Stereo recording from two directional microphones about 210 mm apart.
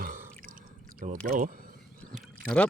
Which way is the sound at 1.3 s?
40° right (ahead or behind).